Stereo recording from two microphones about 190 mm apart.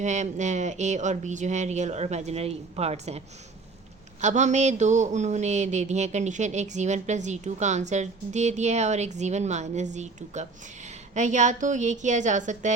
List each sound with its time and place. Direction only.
0.0 s speech: 40° right (ahead or behind)